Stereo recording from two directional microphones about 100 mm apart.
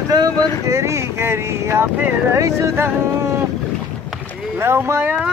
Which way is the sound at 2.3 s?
30° right (ahead or behind).